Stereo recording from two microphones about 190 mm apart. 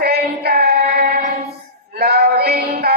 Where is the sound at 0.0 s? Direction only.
55° right (ahead or behind).